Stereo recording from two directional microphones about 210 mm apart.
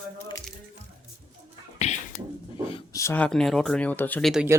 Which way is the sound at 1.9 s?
30° left (ahead or behind).